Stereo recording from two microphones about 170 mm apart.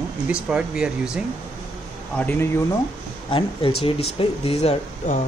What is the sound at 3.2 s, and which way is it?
Speech, 30° left (ahead or behind).